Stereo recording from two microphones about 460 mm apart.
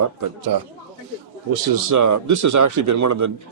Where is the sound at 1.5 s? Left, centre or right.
Right.